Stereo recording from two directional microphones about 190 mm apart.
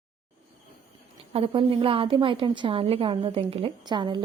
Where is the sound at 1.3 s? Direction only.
30° right (ahead or behind).